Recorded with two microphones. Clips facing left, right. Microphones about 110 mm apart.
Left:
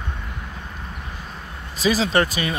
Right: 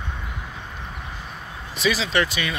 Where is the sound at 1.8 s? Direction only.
40° left (ahead or behind).